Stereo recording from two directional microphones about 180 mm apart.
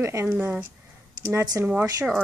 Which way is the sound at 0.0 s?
15° right (ahead or behind).